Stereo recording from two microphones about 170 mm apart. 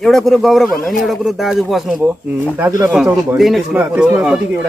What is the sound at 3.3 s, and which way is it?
Speech, centre (ahead or behind).